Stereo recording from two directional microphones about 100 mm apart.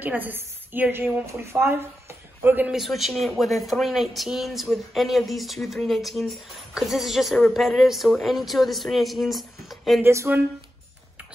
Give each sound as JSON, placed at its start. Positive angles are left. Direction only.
{"t": 0.0, "sound": "a woman's voice", "side_deg": -15}
{"t": 2.7, "sound": "speech", "side_deg": 0}
{"t": 10.0, "sound": "speech", "side_deg": -25}